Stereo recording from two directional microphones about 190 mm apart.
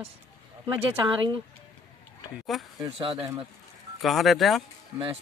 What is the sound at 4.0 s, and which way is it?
Speech, centre (ahead or behind).